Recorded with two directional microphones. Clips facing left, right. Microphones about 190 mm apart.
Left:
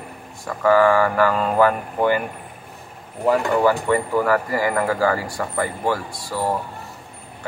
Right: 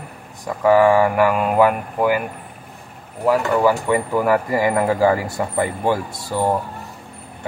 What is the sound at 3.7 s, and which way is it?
A man's voice, 15° right (ahead or behind).